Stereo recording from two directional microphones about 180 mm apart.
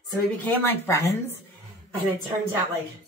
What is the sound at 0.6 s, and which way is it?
Speech, 10° left (ahead or behind).